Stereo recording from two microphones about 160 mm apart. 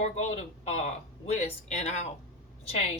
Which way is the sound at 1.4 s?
40° left (ahead or behind).